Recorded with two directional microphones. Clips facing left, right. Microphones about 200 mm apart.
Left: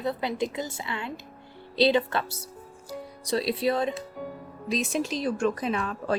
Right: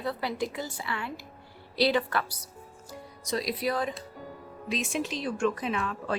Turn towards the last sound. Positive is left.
turn(degrees=35)  # may be behind; listen again after turning